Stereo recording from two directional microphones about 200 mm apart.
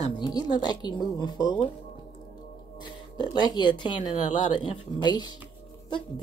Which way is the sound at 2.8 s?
20° left (ahead or behind).